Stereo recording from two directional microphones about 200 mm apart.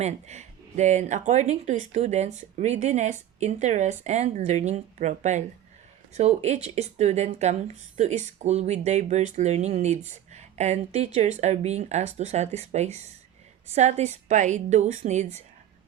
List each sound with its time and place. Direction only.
0.0 s speech: 35° right (ahead or behind)